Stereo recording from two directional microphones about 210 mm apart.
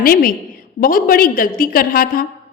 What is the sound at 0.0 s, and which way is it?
A woman's voice, 40° left (ahead or behind).